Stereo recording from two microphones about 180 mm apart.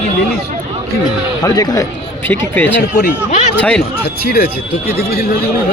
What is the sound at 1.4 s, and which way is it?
Speech, 20° left (ahead or behind).